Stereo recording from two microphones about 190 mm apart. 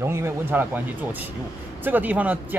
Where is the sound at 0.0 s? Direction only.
10° right (ahead or behind).